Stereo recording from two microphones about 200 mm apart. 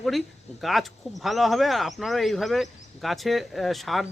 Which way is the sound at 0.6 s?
Centre (ahead or behind).